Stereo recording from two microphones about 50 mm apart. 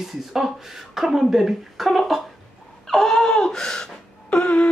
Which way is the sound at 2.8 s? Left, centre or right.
Centre.